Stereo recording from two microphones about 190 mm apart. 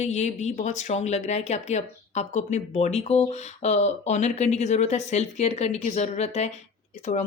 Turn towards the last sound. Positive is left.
turn(degrees=35)  # may be behind; listen again after turning